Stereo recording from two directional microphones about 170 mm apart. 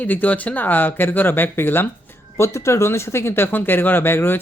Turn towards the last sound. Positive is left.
turn(degrees=15)  # may be behind; listen again after turning